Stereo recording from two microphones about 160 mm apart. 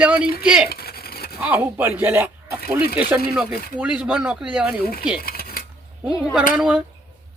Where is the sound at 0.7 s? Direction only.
75° left (ahead or behind).